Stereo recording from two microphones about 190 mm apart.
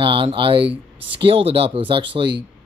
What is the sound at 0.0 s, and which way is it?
Speech, 25° right (ahead or behind).